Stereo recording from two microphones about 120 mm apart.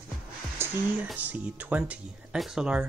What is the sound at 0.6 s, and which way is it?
Music, 20° right (ahead or behind).